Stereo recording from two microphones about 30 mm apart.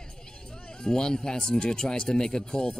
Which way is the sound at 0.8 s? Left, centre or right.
Left.